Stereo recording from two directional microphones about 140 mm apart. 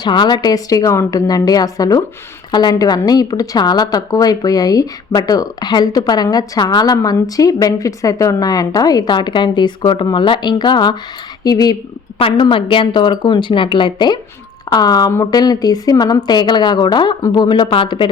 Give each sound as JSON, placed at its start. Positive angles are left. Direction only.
{"t": 0.0, "sound": "a woman's voice", "side_deg": 30}